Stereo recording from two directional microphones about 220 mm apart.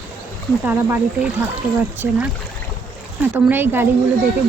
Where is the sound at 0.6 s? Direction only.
10° right (ahead or behind).